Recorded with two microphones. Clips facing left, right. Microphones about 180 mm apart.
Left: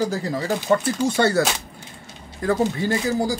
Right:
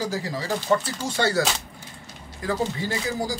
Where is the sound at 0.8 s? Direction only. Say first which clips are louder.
Left 6 dB; 55° left (ahead or behind).